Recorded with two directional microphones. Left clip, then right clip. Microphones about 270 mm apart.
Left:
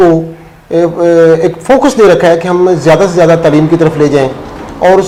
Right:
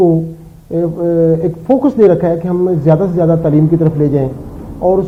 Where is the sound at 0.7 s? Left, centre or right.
Centre.